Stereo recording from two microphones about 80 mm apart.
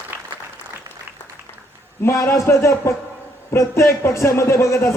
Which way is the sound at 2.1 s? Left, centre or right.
Left.